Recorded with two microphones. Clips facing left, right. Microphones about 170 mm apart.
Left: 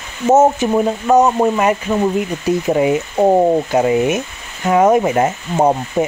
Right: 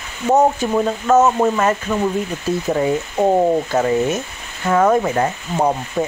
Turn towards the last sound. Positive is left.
turn(degrees=20)  # may be behind; listen again after turning